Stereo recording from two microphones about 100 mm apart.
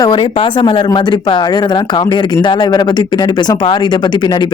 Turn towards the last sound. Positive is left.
turn(degrees=50)  # may be behind; listen again after turning